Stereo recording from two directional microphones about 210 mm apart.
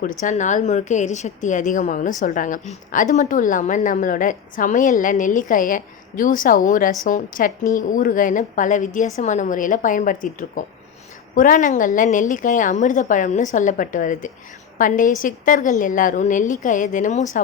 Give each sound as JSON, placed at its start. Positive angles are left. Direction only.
{"t": 0.0, "sound": "a woman's voice", "side_deg": 40}